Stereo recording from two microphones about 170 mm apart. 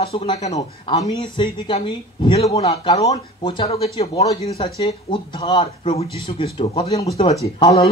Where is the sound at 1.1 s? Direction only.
30° left (ahead or behind).